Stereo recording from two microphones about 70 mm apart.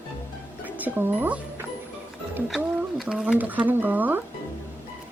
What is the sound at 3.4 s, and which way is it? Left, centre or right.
Speech, right.